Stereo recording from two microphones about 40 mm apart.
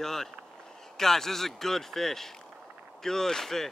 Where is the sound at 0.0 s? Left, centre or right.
Centre.